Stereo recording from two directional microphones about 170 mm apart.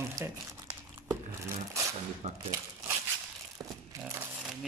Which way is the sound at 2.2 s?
35° right (ahead or behind).